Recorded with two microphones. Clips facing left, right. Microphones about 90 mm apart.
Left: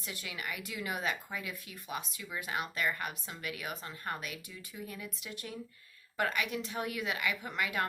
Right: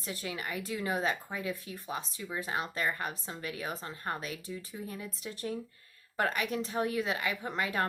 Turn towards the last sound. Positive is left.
turn(degrees=-35)  # may be behind; listen again after turning